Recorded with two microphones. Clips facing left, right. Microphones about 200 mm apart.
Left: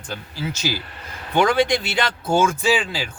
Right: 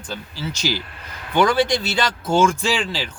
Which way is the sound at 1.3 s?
15° left (ahead or behind).